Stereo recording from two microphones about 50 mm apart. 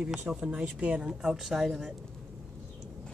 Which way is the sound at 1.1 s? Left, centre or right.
Centre.